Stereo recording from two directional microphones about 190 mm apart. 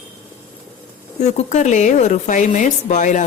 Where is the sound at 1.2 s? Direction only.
35° left (ahead or behind).